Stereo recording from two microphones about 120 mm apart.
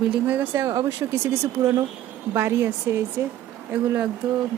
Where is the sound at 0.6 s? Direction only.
25° right (ahead or behind).